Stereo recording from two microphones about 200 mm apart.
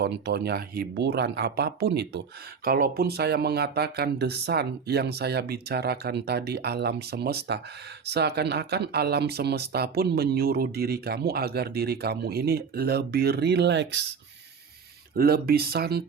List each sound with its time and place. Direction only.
0.0 s speech: 55° right (ahead or behind)
15.1 s speech: 50° right (ahead or behind)